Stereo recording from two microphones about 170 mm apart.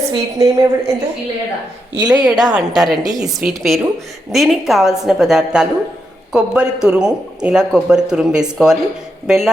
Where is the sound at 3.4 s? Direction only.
Centre (ahead or behind).